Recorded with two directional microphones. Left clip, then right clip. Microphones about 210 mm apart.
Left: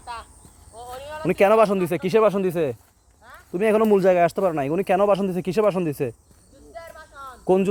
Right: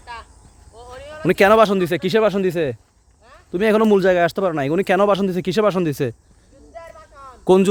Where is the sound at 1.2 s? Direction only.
35° right (ahead or behind).